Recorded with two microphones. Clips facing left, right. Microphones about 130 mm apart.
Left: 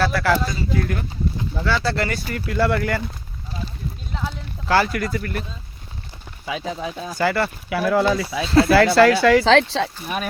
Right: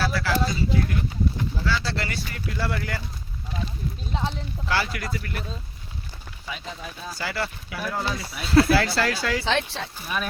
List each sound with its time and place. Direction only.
0.0 s speech: 60° left (ahead or behind)
4.1 s speech: 20° right (ahead or behind)
4.7 s speech: 45° left (ahead or behind)
6.5 s speech: 90° left
7.2 s speech: 60° left (ahead or behind); by 8.4 s 90° left
8.7 s speech: 65° left (ahead or behind); by 9.9 s 90° left